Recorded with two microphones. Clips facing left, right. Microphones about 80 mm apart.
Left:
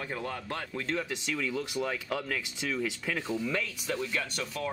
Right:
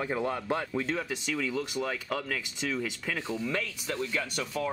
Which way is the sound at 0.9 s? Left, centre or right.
Centre.